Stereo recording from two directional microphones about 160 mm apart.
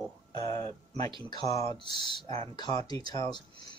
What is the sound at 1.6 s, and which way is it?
Speech, 30° left (ahead or behind).